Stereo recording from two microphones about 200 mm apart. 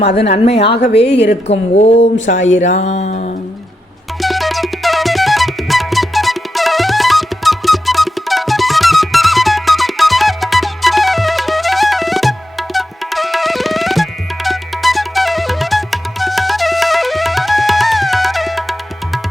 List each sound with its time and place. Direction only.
0.3 s a woman's voice: 30° left (ahead or behind)
4.2 s music: centre (ahead or behind)